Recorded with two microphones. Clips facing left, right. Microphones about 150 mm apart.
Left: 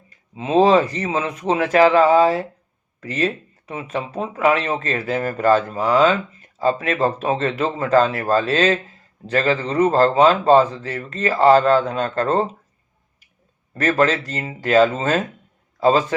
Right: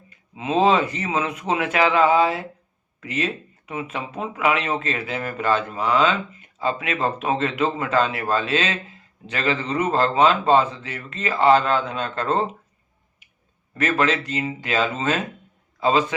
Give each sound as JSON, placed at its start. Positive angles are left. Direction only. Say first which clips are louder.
{"t": 0.3, "sound": "a man's voice", "louder": "left 4 dB", "side_deg": 35}
{"t": 14.0, "sound": "a man's voice", "louder": "left 3 dB", "side_deg": 45}